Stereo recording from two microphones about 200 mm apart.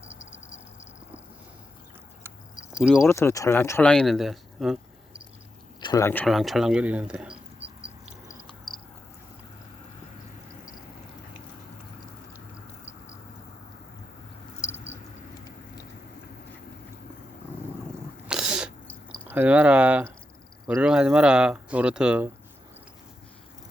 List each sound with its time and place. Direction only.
2.7 s speech: 5° right (ahead or behind)
3.0 s speech: 15° left (ahead or behind); by 5.2 s centre (ahead or behind)
5.8 s speech: 15° left (ahead or behind)
6.2 s mouse: centre (ahead or behind)
8.7 s a sound: 5° left (ahead or behind)
18.3 s cat: 5° right (ahead or behind)
19.3 s speech: 10° right (ahead or behind)